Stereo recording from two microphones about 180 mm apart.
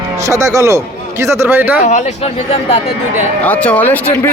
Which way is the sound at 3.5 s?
5° left (ahead or behind).